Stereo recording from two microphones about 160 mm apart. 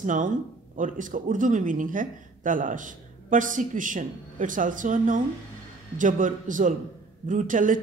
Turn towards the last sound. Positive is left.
turn(degrees=-55)  # may be behind; listen again after turning